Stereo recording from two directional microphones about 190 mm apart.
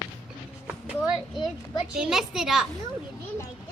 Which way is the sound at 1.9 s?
5° right (ahead or behind).